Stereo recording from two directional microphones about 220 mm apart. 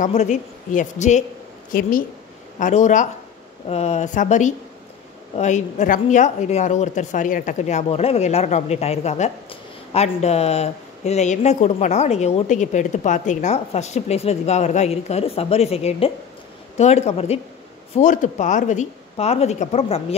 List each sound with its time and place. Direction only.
0.0 s speech: 35° left (ahead or behind)